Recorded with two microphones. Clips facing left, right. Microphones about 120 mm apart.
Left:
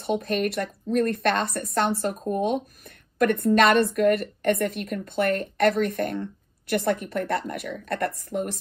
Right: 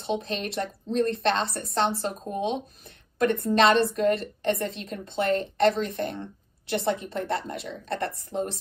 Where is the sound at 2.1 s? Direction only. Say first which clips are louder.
Left 4 dB; 50° left (ahead or behind).